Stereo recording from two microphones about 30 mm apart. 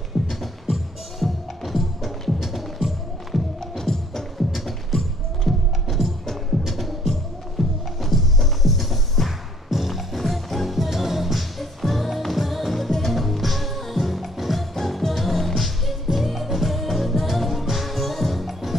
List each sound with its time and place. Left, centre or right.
0.2 s music: centre
2.4 s music: centre
3.7 s music: centre
4.6 s music: centre
5.5 s music: centre
5.9 s music: centre
9.7 s music: centre
14.8 s music: centre